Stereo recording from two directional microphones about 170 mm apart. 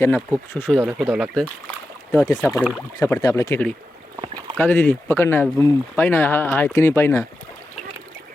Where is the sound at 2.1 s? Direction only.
20° left (ahead or behind).